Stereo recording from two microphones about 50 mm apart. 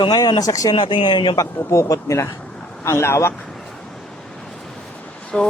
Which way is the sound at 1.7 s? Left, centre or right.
Left.